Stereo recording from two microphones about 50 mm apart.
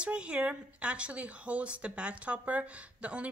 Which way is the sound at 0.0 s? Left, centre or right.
Right.